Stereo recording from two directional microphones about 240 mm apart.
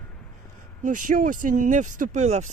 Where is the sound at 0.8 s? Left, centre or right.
Right.